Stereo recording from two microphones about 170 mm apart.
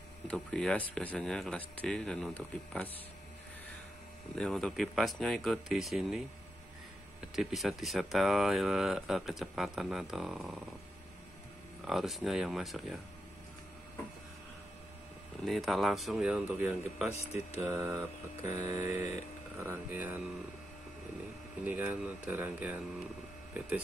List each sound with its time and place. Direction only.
0.3 s speech: 5° left (ahead or behind)
4.4 s speech: 5° left (ahead or behind)
7.3 s speech: centre (ahead or behind)
11.8 s speech: centre (ahead or behind)
15.4 s speech: centre (ahead or behind)
17.6 s mantra: 15° right (ahead or behind)
21.6 s mantra: 10° right (ahead or behind)